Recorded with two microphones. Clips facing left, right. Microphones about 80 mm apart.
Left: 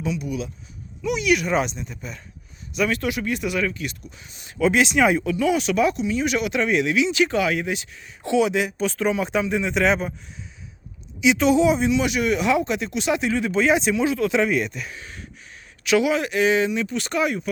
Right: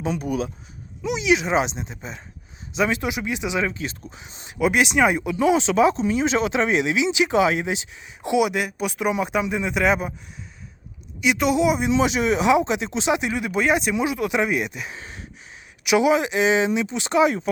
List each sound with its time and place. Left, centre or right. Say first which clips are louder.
0.0 s speech: right 2 dB; right
1.0 s speech: even; centre
4.9 s speech: even; centre
5.2 s speech: right 2 dB; right; by 10.1 s centre
11.2 s speech: left 2 dB; centre
11.9 s speech: right 1 dB; right